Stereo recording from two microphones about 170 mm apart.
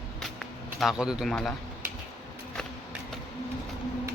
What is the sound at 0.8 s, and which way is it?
Speech, 5° right (ahead or behind).